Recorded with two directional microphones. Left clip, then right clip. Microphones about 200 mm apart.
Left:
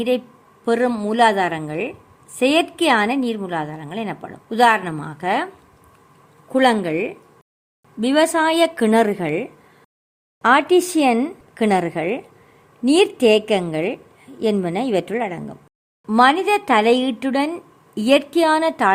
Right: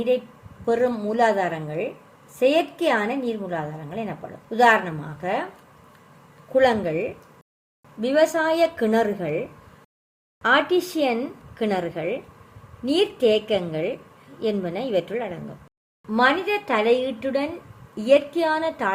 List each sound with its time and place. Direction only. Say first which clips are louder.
0.6 s a woman's voice: left 3 dB; 55° left (ahead or behind)
6.5 s a woman's voice: left 2 dB; 55° left (ahead or behind)
10.4 s a woman's voice: left 5 dB; 65° left (ahead or behind)